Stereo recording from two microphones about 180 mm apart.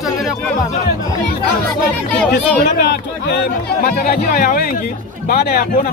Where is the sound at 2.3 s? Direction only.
65° left (ahead or behind).